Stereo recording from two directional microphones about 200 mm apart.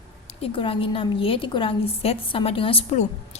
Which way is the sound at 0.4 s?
25° left (ahead or behind).